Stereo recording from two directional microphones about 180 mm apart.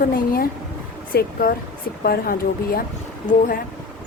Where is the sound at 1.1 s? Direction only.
55° left (ahead or behind).